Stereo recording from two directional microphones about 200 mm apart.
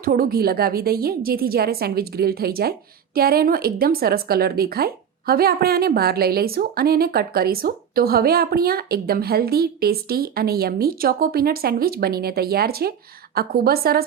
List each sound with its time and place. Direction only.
0.0 s speech: 50° right (ahead or behind)